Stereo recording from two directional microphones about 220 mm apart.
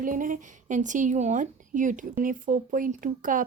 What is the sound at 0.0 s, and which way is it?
A woman's voice, 35° right (ahead or behind).